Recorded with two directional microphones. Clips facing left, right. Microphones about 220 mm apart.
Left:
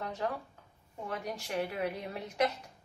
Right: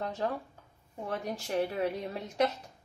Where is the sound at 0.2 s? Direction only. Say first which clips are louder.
Right 2 dB; 35° right (ahead or behind).